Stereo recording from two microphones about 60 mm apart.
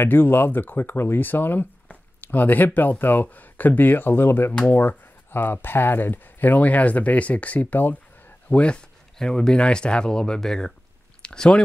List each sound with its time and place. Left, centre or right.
0.0 s speech: left
4.5 s speech: left